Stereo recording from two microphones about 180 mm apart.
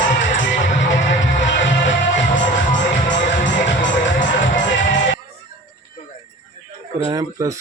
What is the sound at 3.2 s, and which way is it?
Music, 80° left.